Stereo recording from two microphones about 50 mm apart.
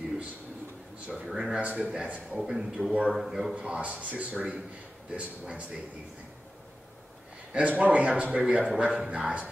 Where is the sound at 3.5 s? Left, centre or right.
Centre.